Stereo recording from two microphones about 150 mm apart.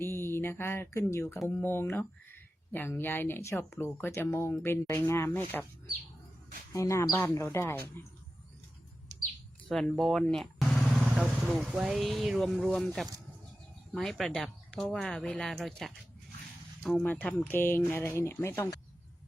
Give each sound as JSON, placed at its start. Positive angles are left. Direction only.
{"t": 0.0, "sound": "a sound", "side_deg": 15}
{"t": 1.5, "sound": "speech", "side_deg": 15}
{"t": 6.7, "sound": "speech", "side_deg": 20}
{"t": 9.6, "sound": "speech", "side_deg": 5}
{"t": 17.0, "sound": "speech", "side_deg": 15}